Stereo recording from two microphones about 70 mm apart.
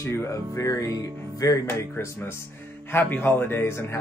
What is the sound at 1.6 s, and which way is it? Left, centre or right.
Speech, left.